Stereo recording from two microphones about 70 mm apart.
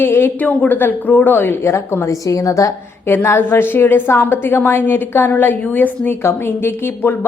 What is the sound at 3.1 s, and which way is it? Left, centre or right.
A woman's voice, left.